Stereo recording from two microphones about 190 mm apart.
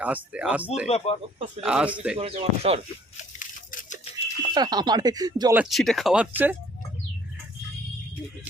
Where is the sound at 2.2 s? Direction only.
30° right (ahead or behind).